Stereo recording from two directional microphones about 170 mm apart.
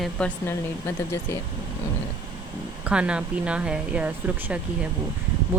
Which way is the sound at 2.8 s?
5° right (ahead or behind).